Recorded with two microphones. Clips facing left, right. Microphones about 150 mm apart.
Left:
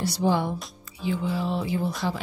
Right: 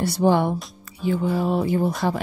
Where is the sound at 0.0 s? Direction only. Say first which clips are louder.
Right 5 dB; 55° right (ahead or behind).